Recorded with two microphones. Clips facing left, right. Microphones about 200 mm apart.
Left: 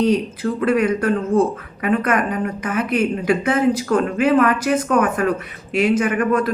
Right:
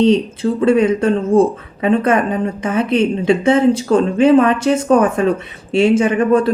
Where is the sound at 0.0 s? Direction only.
25° right (ahead or behind).